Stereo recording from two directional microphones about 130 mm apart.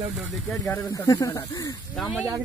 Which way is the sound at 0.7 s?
20° left (ahead or behind).